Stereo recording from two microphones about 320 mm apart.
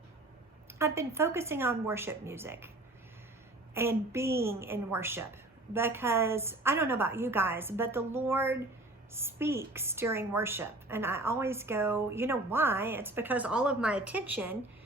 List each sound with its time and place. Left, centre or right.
0.7 s a woman's voice: centre
3.8 s a woman's voice: centre